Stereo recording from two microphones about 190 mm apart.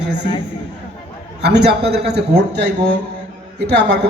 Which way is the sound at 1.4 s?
60° right (ahead or behind).